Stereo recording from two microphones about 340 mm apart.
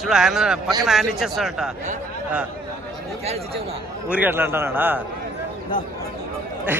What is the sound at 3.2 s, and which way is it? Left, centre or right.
Speech, centre.